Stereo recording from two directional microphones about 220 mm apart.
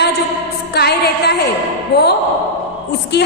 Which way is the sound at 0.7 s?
50° left (ahead or behind).